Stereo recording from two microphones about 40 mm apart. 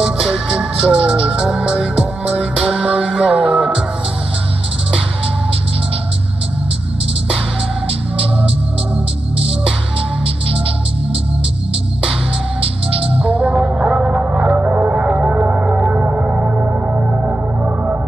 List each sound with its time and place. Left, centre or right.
0.0 s music: right
13.2 s music: right